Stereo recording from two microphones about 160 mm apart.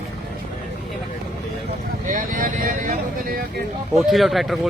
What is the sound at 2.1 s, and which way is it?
Vehicle, 55° right (ahead or behind).